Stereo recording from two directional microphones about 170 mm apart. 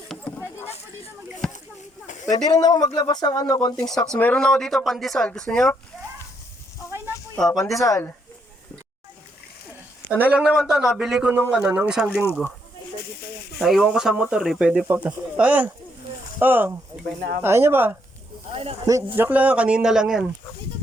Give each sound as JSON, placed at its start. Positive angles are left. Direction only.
{"t": 1.4, "sound": "a sound", "side_deg": 5}
{"t": 2.3, "sound": "speech", "side_deg": 25}
{"t": 3.8, "sound": "speech", "side_deg": 5}
{"t": 7.3, "sound": "speech", "side_deg": 5}
{"t": 7.6, "sound": "speech", "side_deg": 20}
{"t": 10.1, "sound": "speech", "side_deg": -10}
{"t": 13.6, "sound": "speech", "side_deg": 0}
{"t": 19.1, "sound": "speech", "side_deg": -10}